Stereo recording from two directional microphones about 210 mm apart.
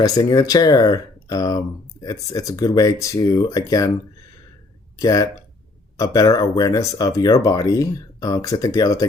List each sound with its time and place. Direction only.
0.0 s speech: 15° left (ahead or behind)
4.9 s speech: 20° left (ahead or behind)